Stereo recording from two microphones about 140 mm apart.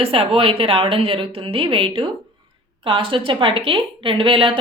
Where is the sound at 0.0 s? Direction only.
40° right (ahead or behind).